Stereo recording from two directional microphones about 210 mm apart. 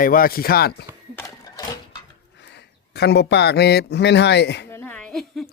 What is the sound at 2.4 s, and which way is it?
Speech, 55° left (ahead or behind).